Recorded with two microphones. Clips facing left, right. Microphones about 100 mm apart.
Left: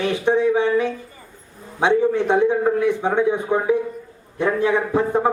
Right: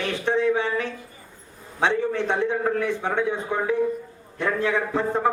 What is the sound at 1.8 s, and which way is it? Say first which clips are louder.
A man's voice: left 5 dB; 15° left (ahead or behind).